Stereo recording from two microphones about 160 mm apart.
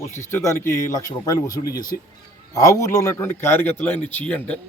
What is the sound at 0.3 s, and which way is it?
Speech, 15° left (ahead or behind).